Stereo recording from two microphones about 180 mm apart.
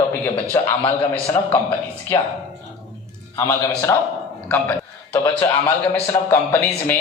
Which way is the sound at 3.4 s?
15° left (ahead or behind).